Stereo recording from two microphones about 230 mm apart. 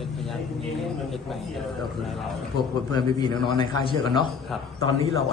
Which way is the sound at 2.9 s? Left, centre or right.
Centre.